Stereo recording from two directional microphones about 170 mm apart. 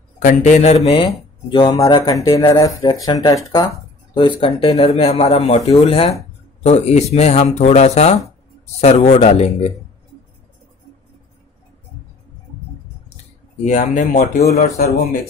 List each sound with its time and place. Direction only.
0.2 s speech: 50° left (ahead or behind)
13.7 s speech: 45° left (ahead or behind)
14.5 s speech: 65° left (ahead or behind)